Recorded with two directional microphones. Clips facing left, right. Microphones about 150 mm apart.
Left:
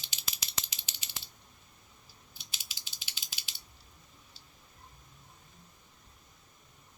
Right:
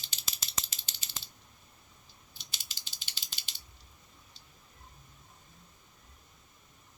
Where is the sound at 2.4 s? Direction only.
10° left (ahead or behind).